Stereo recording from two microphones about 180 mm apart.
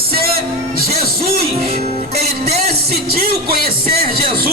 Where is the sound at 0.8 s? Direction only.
55° right (ahead or behind).